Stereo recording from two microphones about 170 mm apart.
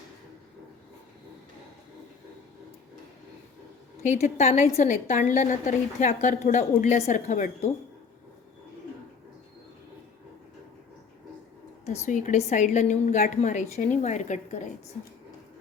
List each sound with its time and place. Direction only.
4.0 s a woman's voice: 45° left (ahead or behind)
12.0 s a woman's voice: 45° left (ahead or behind)